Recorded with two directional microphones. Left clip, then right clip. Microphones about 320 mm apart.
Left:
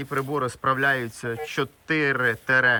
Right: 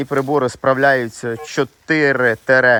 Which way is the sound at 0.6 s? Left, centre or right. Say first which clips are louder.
Right 7 dB; centre.